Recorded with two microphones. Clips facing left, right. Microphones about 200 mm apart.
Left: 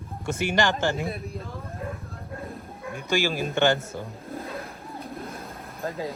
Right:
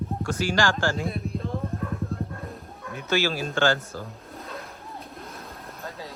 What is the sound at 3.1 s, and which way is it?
Speech, 15° left (ahead or behind).